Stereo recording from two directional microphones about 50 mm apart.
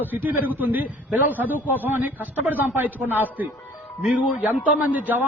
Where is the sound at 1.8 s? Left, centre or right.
Right.